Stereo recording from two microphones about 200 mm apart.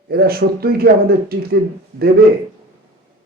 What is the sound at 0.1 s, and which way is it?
A man's voice, 50° right (ahead or behind).